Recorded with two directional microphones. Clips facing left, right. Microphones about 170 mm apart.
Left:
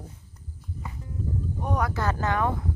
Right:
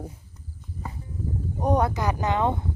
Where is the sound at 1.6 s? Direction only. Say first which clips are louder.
Right 7 dB; 30° right (ahead or behind).